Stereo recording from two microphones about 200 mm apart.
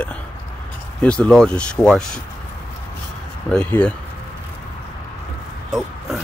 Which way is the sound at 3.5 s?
5° left (ahead or behind).